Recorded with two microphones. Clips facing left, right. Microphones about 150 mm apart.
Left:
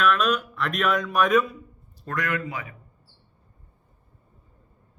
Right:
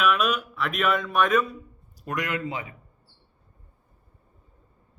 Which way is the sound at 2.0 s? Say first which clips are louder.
Even; 20° right (ahead or behind).